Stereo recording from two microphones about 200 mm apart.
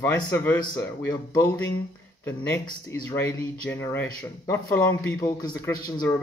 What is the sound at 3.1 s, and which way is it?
A man's voice, 10° left (ahead or behind).